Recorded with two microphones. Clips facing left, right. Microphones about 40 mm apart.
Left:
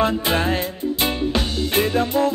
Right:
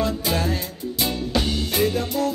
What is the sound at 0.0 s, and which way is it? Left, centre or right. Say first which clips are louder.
Music: left 4 dB; left.